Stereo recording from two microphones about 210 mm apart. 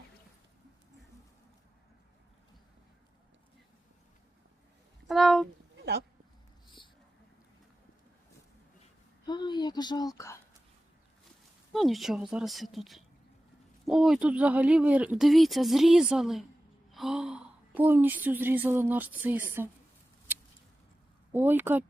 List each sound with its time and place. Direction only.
5.0 s speech: centre (ahead or behind)
5.7 s a sound: 55° right (ahead or behind)
9.2 s speech: 20° left (ahead or behind)
11.7 s speech: centre (ahead or behind)
21.3 s speech: 10° right (ahead or behind)